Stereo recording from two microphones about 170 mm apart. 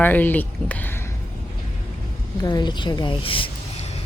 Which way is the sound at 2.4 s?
25° left (ahead or behind).